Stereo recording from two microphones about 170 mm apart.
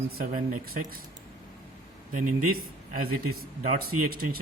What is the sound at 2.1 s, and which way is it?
Speech, 50° right (ahead or behind).